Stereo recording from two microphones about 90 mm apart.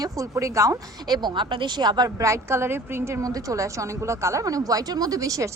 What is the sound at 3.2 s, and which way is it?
Speech, 40° right (ahead or behind).